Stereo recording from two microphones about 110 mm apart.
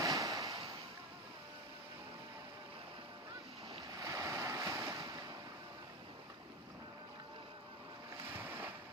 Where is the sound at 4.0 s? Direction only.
30° right (ahead or behind).